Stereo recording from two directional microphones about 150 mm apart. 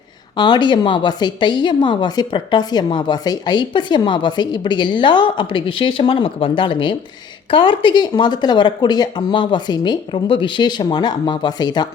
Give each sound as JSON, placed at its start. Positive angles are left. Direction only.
{"t": 0.3, "sound": "a woman's voice", "side_deg": 30}